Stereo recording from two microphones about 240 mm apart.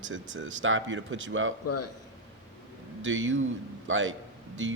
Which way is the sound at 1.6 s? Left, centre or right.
Left.